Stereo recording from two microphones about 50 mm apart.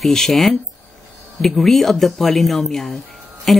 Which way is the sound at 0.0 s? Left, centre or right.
Centre.